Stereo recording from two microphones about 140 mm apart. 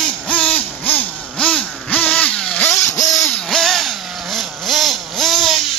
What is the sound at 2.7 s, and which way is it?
Vehicle, 20° left (ahead or behind).